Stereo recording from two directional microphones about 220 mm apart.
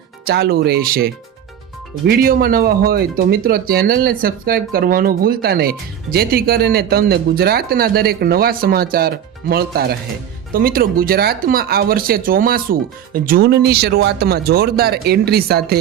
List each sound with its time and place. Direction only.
0.3 s speech: 45° right (ahead or behind)